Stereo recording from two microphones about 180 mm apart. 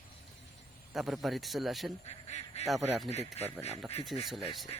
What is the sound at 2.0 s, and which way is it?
Speech, 35° left (ahead or behind).